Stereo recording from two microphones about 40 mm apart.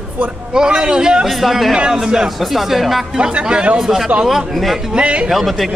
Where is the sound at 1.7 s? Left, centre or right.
Right.